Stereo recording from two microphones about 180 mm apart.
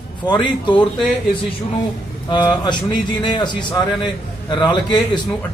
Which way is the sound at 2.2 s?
25° left (ahead or behind).